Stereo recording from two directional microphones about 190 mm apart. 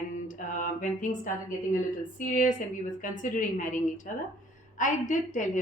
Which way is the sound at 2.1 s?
45° left (ahead or behind).